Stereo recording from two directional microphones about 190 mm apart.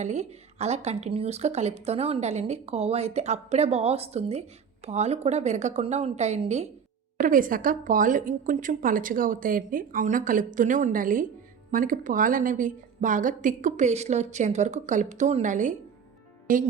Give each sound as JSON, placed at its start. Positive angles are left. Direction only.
{"t": 0.0, "sound": "a woman's voice", "side_deg": -35}
{"t": 7.2, "sound": "a woman's voice", "side_deg": -45}